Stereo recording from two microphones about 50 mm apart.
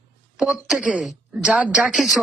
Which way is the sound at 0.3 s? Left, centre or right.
Centre.